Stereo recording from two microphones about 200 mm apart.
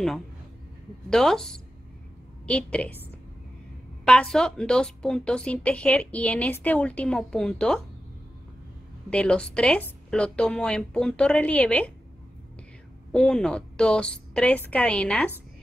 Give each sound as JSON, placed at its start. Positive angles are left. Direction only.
{"t": 1.1, "sound": "a woman's voice", "side_deg": 0}
{"t": 9.1, "sound": "a woman's voice", "side_deg": 5}
{"t": 13.1, "sound": "a woman's voice", "side_deg": 5}